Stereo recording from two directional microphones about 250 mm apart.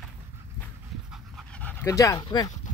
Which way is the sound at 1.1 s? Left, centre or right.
Centre.